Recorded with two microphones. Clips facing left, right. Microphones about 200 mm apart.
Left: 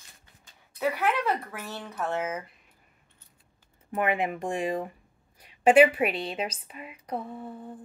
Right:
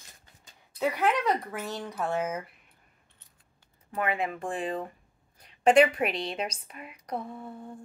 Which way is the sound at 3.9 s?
20° left (ahead or behind).